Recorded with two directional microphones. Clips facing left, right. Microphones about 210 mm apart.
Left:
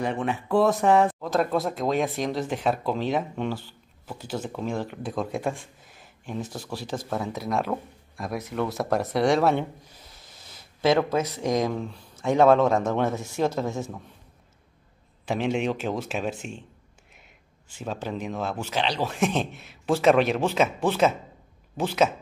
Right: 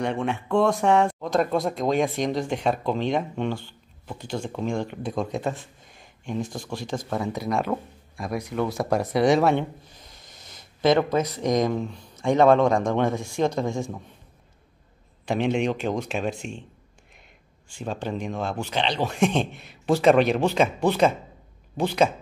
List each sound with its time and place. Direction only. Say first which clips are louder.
0.0 s speech: right 1 dB; centre (ahead or behind)
9.8 s a sound: right 1 dB; 10° left (ahead or behind)
11.3 s speech: right 2 dB; 5° left (ahead or behind)
15.2 s speech: right 2 dB; 5° left (ahead or behind)
17.7 s speech: right 2 dB; 5° left (ahead or behind)